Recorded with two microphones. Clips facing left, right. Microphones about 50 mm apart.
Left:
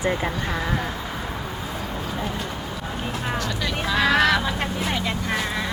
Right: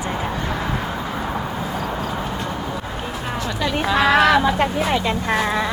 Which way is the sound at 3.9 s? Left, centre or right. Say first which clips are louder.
Right 4 dB; right.